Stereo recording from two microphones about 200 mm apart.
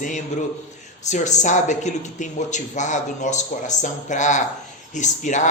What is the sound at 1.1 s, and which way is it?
Speech, 35° left (ahead or behind).